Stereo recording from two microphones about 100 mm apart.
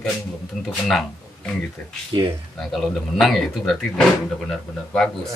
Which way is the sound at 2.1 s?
65° right (ahead or behind).